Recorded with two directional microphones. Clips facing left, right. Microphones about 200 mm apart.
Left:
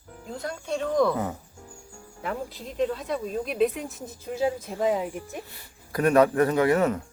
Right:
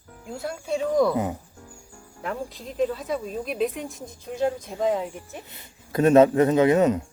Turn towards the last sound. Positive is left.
turn(degrees=-20)  # may be behind; listen again after turning